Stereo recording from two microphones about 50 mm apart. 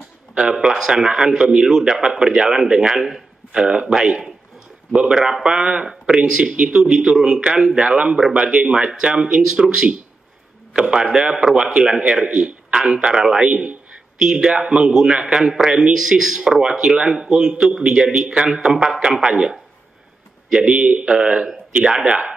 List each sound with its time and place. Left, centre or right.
0.4 s speech: centre
6.7 s speech: centre
20.5 s speech: centre